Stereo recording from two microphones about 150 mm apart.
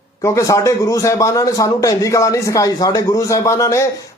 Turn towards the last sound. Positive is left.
turn(degrees=20)  # may be behind; listen again after turning